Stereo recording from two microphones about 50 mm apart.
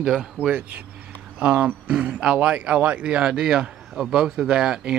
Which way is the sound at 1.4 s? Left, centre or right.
Right.